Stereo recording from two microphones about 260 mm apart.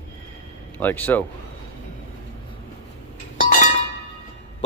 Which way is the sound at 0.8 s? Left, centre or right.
Centre.